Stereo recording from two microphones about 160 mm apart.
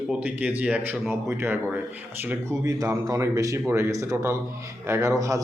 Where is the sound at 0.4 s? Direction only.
5° right (ahead or behind).